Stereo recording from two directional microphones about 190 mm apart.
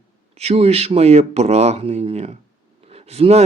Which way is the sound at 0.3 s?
35° right (ahead or behind).